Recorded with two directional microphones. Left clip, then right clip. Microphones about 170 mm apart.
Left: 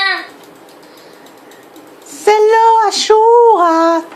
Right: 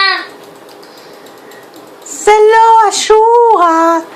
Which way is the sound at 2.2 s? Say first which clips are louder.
Right 3 dB; 15° left (ahead or behind).